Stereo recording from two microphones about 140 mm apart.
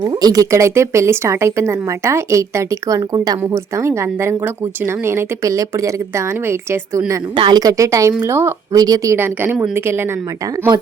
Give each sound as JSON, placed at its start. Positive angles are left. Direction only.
{"t": 0.0, "sound": "speech", "side_deg": -30}
{"t": 7.3, "sound": "a woman's voice", "side_deg": -30}